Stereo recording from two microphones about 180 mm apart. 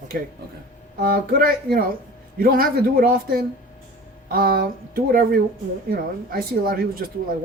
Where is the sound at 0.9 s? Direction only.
55° right (ahead or behind).